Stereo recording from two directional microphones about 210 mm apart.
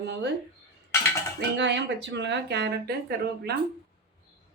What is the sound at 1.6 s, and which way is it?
Speech, 55° right (ahead or behind).